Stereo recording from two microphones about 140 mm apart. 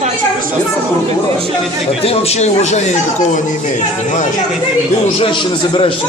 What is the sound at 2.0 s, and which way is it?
Speech, 45° left (ahead or behind).